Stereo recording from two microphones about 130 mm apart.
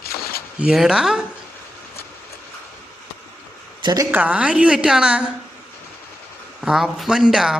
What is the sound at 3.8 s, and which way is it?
Speech, 30° right (ahead or behind).